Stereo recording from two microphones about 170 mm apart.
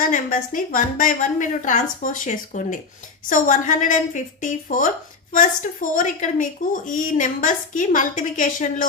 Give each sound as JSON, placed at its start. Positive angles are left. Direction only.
{"t": 0.0, "sound": "a woman's voice", "side_deg": 50}